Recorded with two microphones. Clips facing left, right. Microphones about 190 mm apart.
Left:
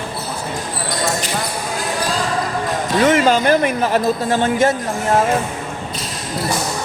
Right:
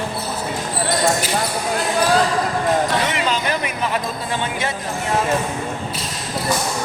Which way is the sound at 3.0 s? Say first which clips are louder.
Left 8 dB; 50° left (ahead or behind).